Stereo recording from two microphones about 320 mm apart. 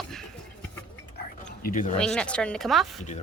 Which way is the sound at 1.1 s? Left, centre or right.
Left.